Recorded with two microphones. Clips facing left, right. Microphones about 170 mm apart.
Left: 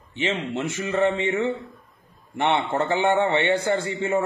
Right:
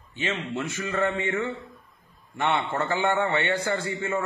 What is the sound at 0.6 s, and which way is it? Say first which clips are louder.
A man's voice: left 5 dB; 25° left (ahead or behind).